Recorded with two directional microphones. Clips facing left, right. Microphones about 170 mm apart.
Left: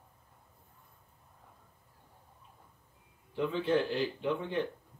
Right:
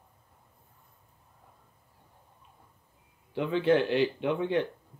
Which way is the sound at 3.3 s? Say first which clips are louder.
Right 5 dB; 75° right (ahead or behind).